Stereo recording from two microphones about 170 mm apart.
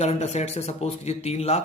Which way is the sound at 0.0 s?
40° left (ahead or behind).